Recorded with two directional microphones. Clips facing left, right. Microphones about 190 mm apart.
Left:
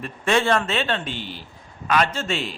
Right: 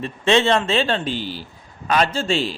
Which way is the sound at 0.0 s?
25° right (ahead or behind).